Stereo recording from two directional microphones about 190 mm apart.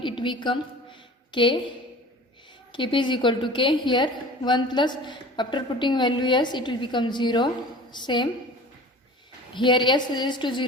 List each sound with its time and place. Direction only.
0.0 s a woman's voice: 25° left (ahead or behind)
2.7 s a woman's voice: 25° left (ahead or behind)
9.6 s a woman's voice: 25° left (ahead or behind)